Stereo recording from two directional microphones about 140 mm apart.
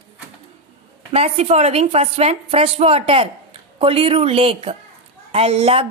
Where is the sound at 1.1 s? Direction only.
45° right (ahead or behind).